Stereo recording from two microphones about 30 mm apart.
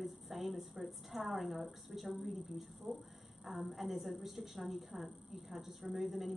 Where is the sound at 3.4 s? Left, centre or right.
Centre.